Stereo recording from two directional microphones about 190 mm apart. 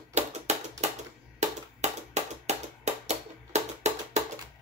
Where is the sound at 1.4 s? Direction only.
35° right (ahead or behind).